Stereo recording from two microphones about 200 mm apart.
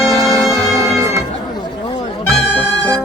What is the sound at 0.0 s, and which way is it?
Music, 15° right (ahead or behind).